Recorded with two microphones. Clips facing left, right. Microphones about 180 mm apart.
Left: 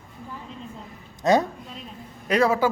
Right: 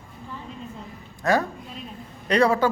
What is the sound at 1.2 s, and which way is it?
Speech, 20° left (ahead or behind).